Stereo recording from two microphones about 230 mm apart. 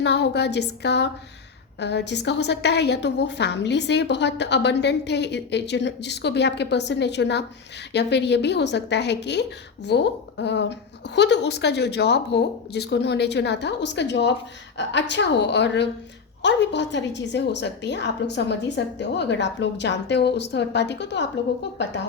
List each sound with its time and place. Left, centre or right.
0.0 s a woman's voice: left